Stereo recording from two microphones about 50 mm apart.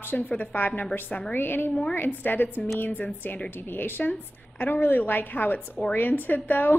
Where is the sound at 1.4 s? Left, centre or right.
Left.